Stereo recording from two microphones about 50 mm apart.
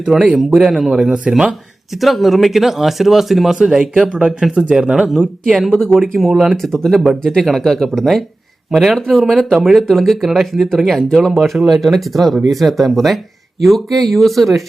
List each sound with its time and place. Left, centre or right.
0.0 s speech: centre
4.3 s speech: centre
4.5 s speech: centre
5.6 s speech: centre
6.1 s speech: centre